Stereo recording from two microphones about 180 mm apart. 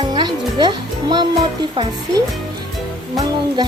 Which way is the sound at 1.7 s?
25° right (ahead or behind).